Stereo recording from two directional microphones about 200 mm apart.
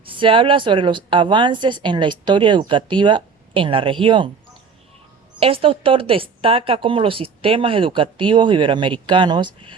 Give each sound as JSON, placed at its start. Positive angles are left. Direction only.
{"t": 0.0, "sound": "speech", "side_deg": -25}
{"t": 5.4, "sound": "speech", "side_deg": -30}